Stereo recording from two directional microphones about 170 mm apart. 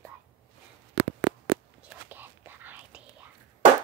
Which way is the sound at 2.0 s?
10° right (ahead or behind).